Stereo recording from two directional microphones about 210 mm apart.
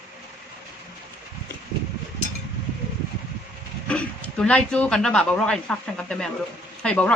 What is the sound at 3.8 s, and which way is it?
Speech, 5° left (ahead or behind).